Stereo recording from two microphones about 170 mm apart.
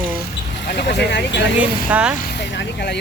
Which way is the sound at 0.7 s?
80° left.